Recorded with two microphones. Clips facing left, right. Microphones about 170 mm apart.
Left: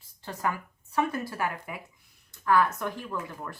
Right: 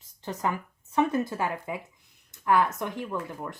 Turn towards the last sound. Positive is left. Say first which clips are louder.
# right 2 dB
turn(degrees=-20)  # may be behind; listen again after turning